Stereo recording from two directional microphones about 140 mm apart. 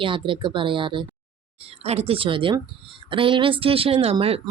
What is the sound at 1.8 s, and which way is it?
Speech, 45° right (ahead or behind).